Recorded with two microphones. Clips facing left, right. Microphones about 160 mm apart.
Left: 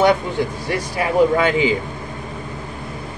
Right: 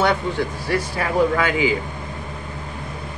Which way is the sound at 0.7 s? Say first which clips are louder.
Left 1 dB; 15° left (ahead or behind).